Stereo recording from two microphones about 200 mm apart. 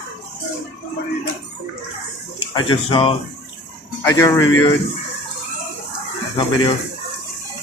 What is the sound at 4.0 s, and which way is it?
Speech, 15° left (ahead or behind).